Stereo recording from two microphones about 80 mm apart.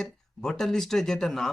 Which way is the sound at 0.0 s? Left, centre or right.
Centre.